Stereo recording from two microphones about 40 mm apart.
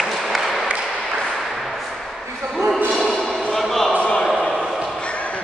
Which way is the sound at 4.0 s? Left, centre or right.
Left.